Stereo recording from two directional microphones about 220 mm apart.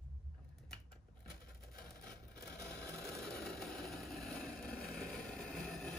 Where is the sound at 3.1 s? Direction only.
Centre (ahead or behind).